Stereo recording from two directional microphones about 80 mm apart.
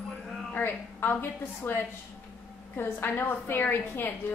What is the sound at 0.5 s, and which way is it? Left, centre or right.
A woman's voice, left.